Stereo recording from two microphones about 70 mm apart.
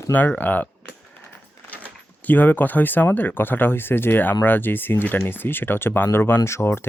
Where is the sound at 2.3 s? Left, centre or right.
Left.